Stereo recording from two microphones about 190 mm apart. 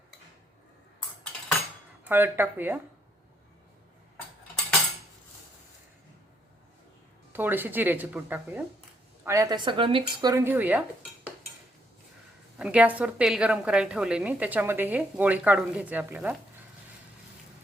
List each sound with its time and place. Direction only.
2.0 s a woman's voice: 10° right (ahead or behind)
7.3 s a woman's voice: 10° right (ahead or behind)
12.5 s a woman's voice: 5° right (ahead or behind)